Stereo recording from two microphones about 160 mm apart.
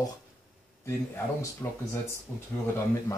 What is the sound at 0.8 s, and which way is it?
Speech, 15° left (ahead or behind).